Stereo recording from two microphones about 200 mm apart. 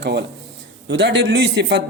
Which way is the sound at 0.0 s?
55° right (ahead or behind).